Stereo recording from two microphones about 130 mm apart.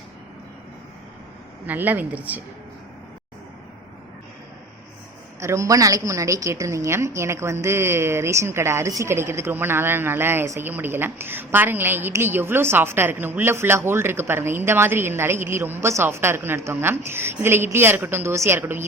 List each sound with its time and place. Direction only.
1.6 s a woman's voice: 15° right (ahead or behind)
5.4 s a woman's voice: 20° right (ahead or behind)